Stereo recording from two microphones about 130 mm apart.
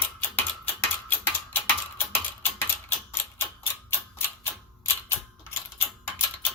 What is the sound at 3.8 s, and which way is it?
Tick-tock, 15° left (ahead or behind).